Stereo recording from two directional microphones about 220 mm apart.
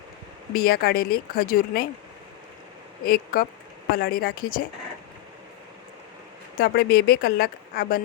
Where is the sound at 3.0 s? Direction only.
40° left (ahead or behind).